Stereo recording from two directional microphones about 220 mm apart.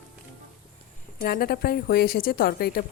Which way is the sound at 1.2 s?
45° left (ahead or behind).